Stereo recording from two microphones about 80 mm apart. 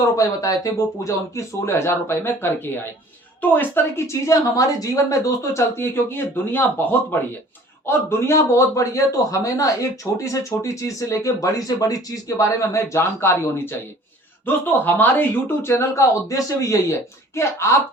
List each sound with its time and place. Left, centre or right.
0.2 s speech: left
4.0 s speech: left
7.9 s a man's voice: left